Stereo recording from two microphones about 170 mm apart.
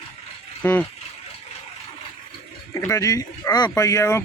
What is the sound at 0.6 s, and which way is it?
Speech, 10° left (ahead or behind).